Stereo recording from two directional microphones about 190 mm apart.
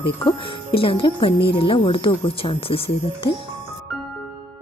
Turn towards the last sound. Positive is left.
turn(degrees=30)  # may be behind; listen again after turning